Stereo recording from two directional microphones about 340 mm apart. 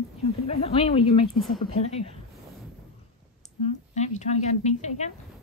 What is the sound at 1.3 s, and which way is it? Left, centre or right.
Speech, centre.